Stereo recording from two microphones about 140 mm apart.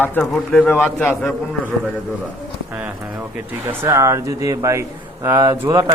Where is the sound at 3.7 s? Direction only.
20° right (ahead or behind).